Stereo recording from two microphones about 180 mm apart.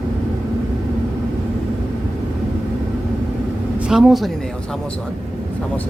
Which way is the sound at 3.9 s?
5° right (ahead or behind).